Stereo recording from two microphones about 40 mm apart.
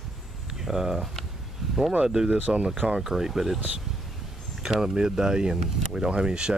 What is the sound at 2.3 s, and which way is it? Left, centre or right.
Speech, right.